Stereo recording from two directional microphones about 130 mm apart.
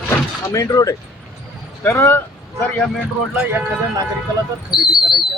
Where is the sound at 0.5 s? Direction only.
25° left (ahead or behind).